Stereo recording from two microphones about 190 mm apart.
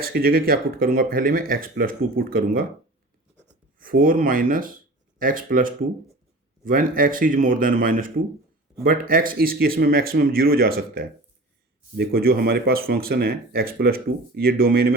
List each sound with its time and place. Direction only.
0.0 s speech: 50° right (ahead or behind)
3.8 s speech: 45° right (ahead or behind)